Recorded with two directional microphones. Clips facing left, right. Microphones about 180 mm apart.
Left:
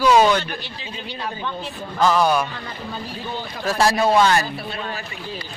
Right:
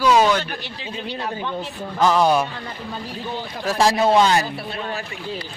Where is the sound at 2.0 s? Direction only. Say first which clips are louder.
Right 1 dB; 20° right (ahead or behind).